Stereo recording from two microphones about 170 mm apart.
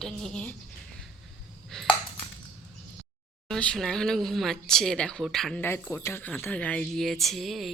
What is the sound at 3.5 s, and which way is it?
Speech, 5° left (ahead or behind).